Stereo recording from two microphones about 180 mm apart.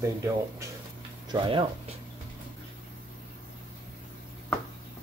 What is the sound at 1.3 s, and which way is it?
Speech, 30° right (ahead or behind).